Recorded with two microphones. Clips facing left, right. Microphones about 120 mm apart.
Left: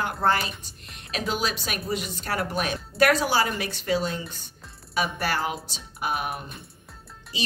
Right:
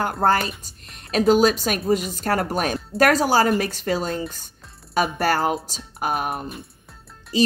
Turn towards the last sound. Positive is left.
turn(degrees=-40)  # may be behind; listen again after turning